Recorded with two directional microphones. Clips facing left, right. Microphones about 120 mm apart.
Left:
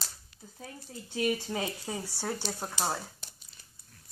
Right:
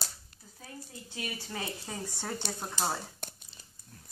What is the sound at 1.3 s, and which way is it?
Speech, 20° left (ahead or behind).